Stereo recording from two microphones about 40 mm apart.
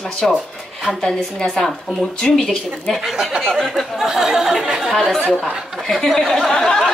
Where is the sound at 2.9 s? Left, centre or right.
Centre.